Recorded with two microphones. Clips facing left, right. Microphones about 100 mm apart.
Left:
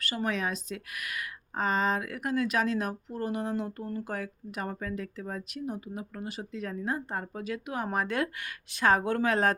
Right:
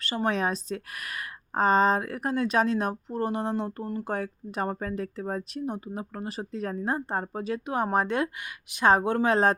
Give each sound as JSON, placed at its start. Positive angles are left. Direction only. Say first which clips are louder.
{"t": 0.0, "sound": "speech", "louder": "right 4 dB", "side_deg": -25}